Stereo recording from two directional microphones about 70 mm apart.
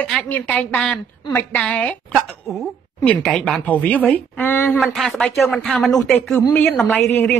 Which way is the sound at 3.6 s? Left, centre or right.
Left.